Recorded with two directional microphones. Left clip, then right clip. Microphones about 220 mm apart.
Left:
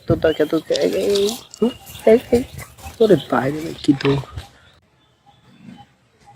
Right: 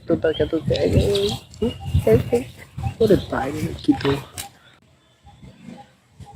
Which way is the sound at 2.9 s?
20° left (ahead or behind).